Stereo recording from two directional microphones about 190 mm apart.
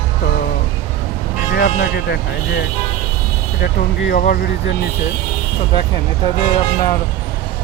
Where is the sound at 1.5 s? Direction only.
60° left (ahead or behind).